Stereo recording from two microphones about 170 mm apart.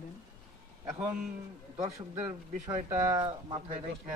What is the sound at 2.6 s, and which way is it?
Speech, 20° right (ahead or behind).